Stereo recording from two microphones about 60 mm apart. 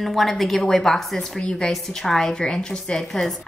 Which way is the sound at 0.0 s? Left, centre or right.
Centre.